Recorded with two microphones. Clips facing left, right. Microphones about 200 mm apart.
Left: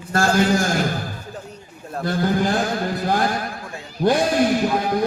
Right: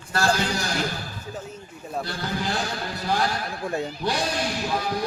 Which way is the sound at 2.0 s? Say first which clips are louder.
Left 12 dB; 50° left (ahead or behind).